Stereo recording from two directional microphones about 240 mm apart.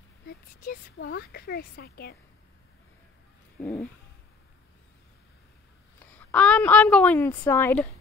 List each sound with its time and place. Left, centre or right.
0.3 s speech: left
3.5 s a sound: centre
5.9 s a woman's voice: centre